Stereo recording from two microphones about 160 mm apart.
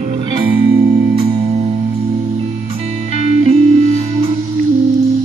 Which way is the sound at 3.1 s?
40° right (ahead or behind).